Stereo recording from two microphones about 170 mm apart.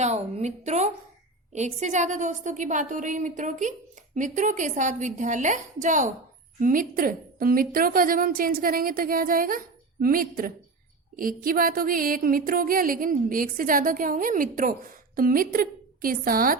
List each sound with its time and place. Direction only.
0.0 s a woman's voice: 40° right (ahead or behind)
6.6 s music: 55° right (ahead or behind)